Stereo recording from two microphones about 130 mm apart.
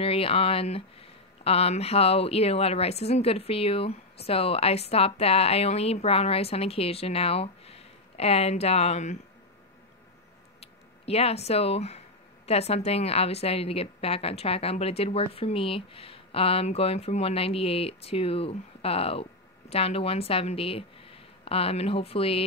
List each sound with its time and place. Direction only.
0.0 s a woman's voice: 45° left (ahead or behind)
10.6 s a woman's voice: 50° left (ahead or behind)